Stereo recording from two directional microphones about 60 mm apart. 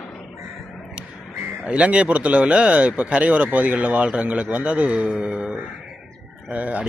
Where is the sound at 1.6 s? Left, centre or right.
Right.